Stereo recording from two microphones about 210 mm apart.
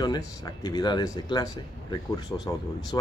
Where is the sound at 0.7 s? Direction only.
20° left (ahead or behind).